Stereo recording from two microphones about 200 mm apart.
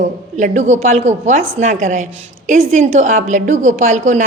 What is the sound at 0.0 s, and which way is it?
A woman's voice, 40° right (ahead or behind).